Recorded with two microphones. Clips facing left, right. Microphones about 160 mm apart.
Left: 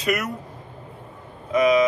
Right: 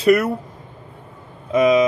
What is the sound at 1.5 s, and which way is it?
Speech, 25° right (ahead or behind).